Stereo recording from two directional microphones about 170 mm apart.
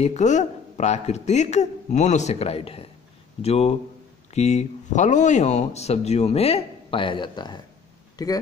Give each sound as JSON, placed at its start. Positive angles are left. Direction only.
{"t": 0.0, "sound": "speech", "side_deg": 45}